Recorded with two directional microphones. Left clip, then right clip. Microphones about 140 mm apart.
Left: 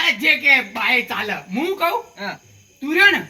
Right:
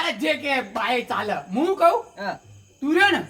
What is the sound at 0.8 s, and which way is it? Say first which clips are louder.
A man's voice: left 4 dB; 20° right (ahead or behind).